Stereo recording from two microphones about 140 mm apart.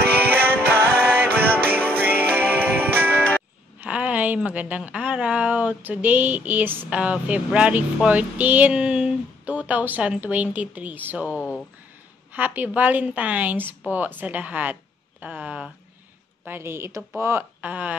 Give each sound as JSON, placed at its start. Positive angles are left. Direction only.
{"t": 0.0, "sound": "music", "side_deg": -15}
{"t": 3.8, "sound": "a woman's voice", "side_deg": -10}
{"t": 11.3, "sound": "speech", "side_deg": 10}
{"t": 12.4, "sound": "a woman's voice", "side_deg": -10}